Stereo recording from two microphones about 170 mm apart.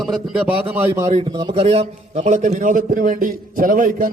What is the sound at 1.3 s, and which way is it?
A man's voice, 25° right (ahead or behind).